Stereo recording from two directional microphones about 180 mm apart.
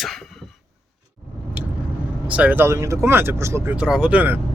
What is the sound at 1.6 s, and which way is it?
Vehicle, 5° right (ahead or behind).